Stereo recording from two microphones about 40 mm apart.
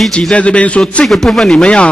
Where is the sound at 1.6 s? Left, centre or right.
Left.